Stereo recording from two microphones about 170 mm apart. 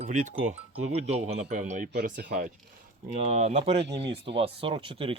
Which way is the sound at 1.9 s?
60° right (ahead or behind).